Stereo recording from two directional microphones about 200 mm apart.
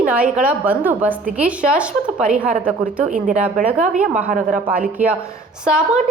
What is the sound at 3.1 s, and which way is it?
Speech, 40° right (ahead or behind).